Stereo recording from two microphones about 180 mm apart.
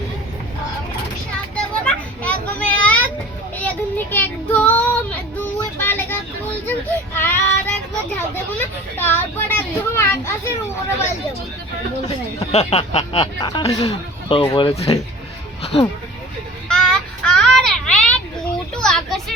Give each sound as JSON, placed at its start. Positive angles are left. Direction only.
{"t": 1.5, "sound": "children playing", "side_deg": 5}
{"t": 3.6, "sound": "child singing", "side_deg": 10}
{"t": 7.2, "sound": "child singing", "side_deg": 15}
{"t": 8.5, "sound": "a sound", "side_deg": 10}
{"t": 12.0, "sound": "speech", "side_deg": 35}
{"t": 16.6, "sound": "child singing", "side_deg": 5}